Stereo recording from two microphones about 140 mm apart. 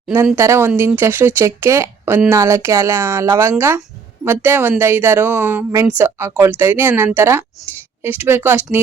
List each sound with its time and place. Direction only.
0.3 s speech: 20° right (ahead or behind)